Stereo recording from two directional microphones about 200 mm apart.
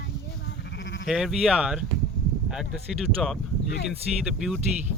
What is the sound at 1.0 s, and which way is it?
Speech, centre (ahead or behind).